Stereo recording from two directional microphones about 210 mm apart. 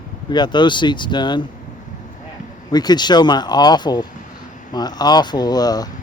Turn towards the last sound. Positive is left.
turn(degrees=20)  # may be behind; listen again after turning